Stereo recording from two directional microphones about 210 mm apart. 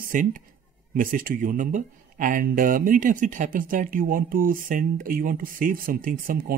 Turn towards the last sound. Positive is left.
turn(degrees=-40)  # may be behind; listen again after turning